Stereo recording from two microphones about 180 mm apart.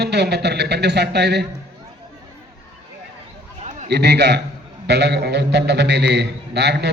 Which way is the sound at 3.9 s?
70° right (ahead or behind).